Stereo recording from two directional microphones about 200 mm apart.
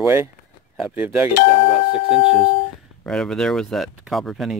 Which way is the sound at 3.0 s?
5° left (ahead or behind).